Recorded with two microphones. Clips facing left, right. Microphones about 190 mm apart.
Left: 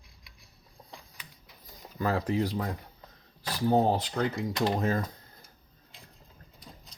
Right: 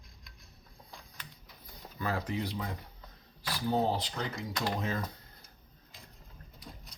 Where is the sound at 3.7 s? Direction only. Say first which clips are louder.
Left 5 dB; 55° left (ahead or behind).